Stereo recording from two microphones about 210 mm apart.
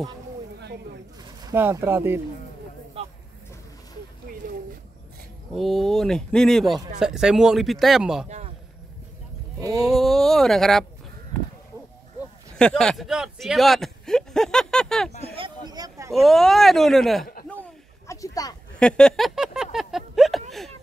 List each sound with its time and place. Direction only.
1.2 s speech: 15° right (ahead or behind)
3.0 s vehicle: 25° right (ahead or behind)
5.5 s speech: centre (ahead or behind)
9.6 s speech: 15° right (ahead or behind)
9.8 s speech: centre (ahead or behind)
12.5 s speech: 5° left (ahead or behind)
15.3 s a sound: 20° right (ahead or behind)
16.1 s speech: centre (ahead or behind)
17.5 s a sound: 10° left (ahead or behind)
18.8 s a sound: 5° left (ahead or behind)